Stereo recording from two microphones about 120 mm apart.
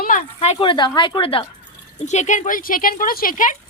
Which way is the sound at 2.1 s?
80° left.